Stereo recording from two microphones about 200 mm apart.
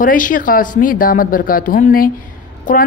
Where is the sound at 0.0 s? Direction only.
45° left (ahead or behind).